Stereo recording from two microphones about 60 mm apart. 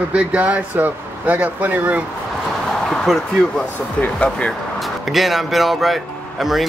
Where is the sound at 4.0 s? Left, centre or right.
Left.